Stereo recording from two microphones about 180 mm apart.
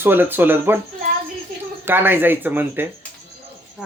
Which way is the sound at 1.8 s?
10° right (ahead or behind).